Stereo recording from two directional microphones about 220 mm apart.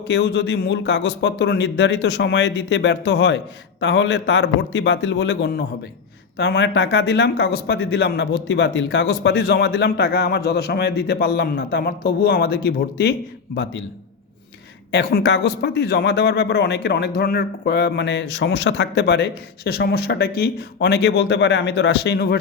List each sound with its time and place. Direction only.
0.1 s speech: 50° left (ahead or behind)
14.9 s speech: 50° left (ahead or behind)